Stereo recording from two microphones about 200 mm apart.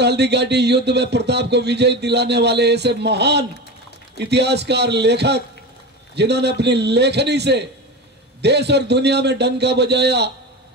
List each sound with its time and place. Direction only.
0.0 s speech: 55° right (ahead or behind)